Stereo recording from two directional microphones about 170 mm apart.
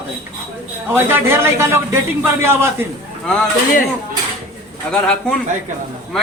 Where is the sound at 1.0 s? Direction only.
15° right (ahead or behind).